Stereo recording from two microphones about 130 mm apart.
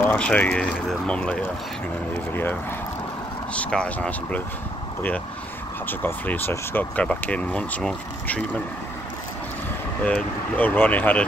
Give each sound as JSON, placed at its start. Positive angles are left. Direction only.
{"t": 0.0, "sound": "speech", "side_deg": 10}
{"t": 3.5, "sound": "speech", "side_deg": 10}
{"t": 5.9, "sound": "speech", "side_deg": 15}
{"t": 10.0, "sound": "speech", "side_deg": 10}